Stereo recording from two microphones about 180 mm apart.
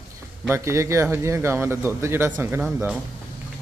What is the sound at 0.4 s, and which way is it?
A man's voice, 15° right (ahead or behind).